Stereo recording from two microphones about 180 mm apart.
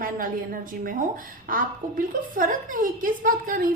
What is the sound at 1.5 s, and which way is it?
A woman's voice, 50° right (ahead or behind).